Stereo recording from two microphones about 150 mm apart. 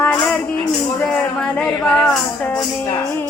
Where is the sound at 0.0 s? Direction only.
5° left (ahead or behind).